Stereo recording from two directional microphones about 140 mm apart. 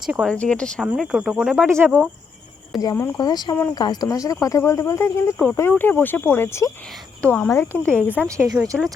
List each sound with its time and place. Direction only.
0.0 s speech: 5° right (ahead or behind)
0.3 s speech: 5° left (ahead or behind)
0.9 s speech: 5° right (ahead or behind)
1.6 s speech: 15° right (ahead or behind)
2.8 s speech: 25° left (ahead or behind)
8.4 s speech: 25° right (ahead or behind)